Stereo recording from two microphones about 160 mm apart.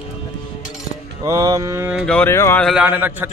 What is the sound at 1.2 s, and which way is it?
Mantra, 20° right (ahead or behind).